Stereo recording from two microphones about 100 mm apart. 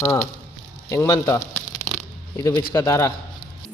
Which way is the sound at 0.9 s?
30° left (ahead or behind).